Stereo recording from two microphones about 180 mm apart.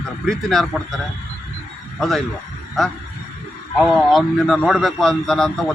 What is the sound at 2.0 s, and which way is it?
Speech, centre (ahead or behind).